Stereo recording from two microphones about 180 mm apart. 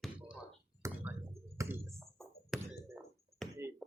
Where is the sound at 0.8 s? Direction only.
15° right (ahead or behind).